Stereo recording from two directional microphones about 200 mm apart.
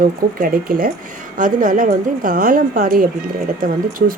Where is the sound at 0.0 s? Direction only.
45° right (ahead or behind).